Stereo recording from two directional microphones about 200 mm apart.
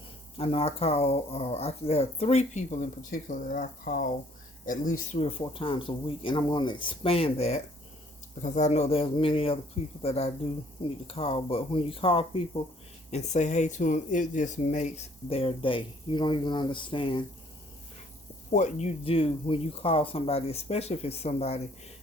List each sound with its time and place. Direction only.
0.3 s speech: 30° left (ahead or behind)
18.5 s speech: 35° left (ahead or behind)